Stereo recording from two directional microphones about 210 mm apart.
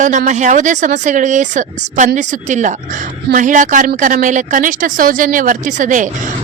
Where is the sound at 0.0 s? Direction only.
35° right (ahead or behind).